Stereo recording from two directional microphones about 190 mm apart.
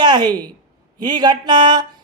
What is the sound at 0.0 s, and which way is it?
Speech, 20° right (ahead or behind).